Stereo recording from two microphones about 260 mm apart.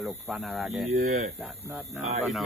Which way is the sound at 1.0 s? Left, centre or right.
Right.